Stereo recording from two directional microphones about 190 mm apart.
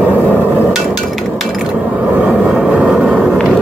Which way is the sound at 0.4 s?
5° right (ahead or behind).